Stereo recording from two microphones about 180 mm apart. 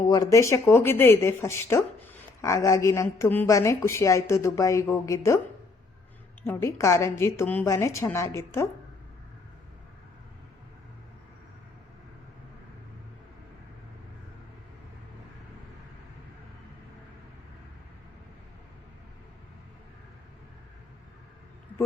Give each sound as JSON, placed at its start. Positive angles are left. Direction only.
{"t": 0.1, "sound": "a woman's voice", "side_deg": 20}
{"t": 6.4, "sound": "a woman's voice", "side_deg": 15}